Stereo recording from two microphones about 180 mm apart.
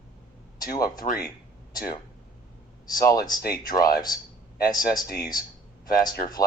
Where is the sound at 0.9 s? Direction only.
50° left (ahead or behind).